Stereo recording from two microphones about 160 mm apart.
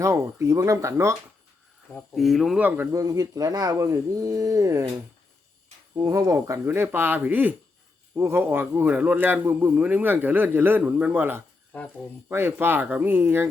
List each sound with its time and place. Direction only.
0.0 s speech: 20° right (ahead or behind)
1.9 s speech: 5° left (ahead or behind); by 4.9 s 20° right (ahead or behind)
6.0 s a man's voice: 20° right (ahead or behind)